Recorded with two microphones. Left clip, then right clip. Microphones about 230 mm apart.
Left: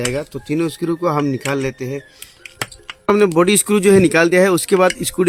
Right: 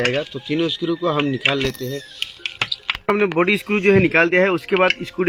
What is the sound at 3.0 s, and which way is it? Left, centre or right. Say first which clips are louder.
Speech: left 5 dB; left.